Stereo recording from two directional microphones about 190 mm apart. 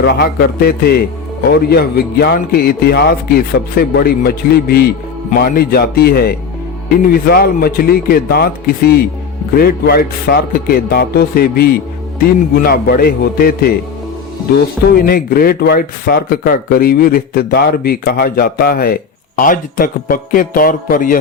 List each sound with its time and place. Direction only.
0.0 s speech: 55° left (ahead or behind)
14.9 s speech: 50° left (ahead or behind)